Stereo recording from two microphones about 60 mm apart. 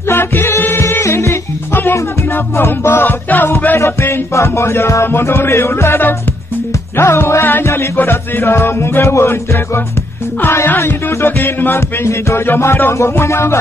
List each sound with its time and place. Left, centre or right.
0.1 s music: left
1.0 s music: left
1.7 s music: left
4.4 s music: left
10.7 s music: left